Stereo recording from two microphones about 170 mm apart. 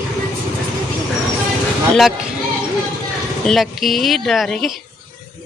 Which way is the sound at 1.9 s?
Centre (ahead or behind).